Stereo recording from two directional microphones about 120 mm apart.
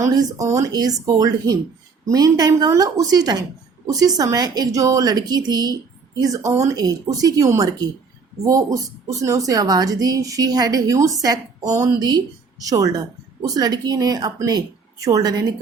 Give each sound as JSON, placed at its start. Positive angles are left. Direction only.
{"t": 0.0, "sound": "a woman's voice", "side_deg": -30}